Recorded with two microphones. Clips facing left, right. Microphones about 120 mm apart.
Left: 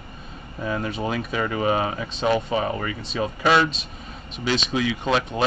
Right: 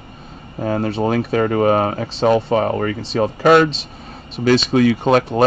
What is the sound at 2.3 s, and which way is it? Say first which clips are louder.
Speech: right 6 dB; 50° right (ahead or behind).